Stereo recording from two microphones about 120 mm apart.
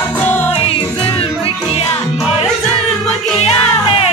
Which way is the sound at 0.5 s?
45° left (ahead or behind).